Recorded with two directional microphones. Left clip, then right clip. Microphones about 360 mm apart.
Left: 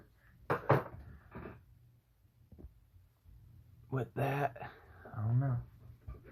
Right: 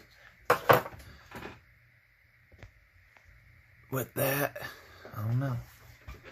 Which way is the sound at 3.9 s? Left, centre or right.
Right.